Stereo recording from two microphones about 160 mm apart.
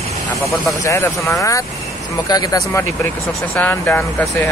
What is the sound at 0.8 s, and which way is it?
Speech, 15° left (ahead or behind).